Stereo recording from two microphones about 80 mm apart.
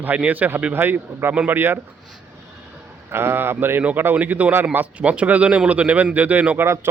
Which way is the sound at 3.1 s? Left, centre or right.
Right.